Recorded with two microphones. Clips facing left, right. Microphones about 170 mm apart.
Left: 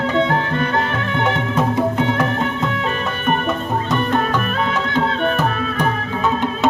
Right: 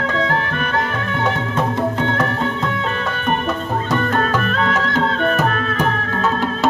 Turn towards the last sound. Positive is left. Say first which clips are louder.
# right 1 dB
turn(degrees=5)  # may be behind; listen again after turning